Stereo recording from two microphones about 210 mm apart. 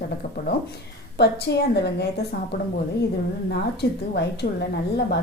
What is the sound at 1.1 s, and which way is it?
Speech, 50° left (ahead or behind).